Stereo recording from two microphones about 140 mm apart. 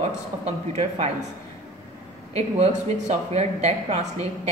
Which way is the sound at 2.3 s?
50° right (ahead or behind).